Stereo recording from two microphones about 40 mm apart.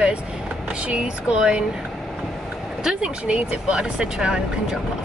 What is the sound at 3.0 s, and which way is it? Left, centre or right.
Speech, right.